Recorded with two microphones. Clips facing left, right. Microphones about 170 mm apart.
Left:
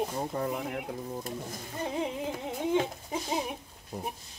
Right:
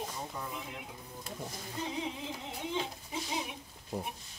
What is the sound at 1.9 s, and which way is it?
Music, 50° left (ahead or behind).